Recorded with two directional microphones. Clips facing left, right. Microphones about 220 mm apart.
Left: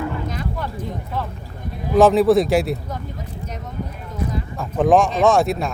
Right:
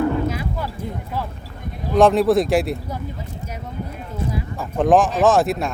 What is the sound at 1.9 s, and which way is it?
Speech, centre (ahead or behind).